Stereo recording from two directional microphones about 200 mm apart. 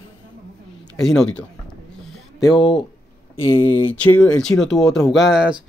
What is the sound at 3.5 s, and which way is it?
Speech, 25° left (ahead or behind).